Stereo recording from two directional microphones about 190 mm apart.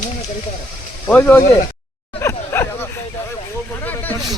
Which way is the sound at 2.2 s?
15° left (ahead or behind).